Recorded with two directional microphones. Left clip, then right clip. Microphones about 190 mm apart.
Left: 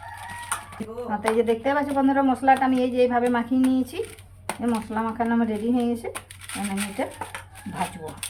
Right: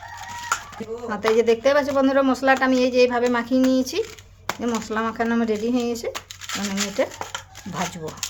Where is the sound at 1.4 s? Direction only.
55° right (ahead or behind).